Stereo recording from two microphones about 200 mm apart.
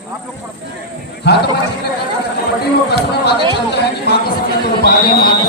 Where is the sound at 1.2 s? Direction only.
55° left (ahead or behind).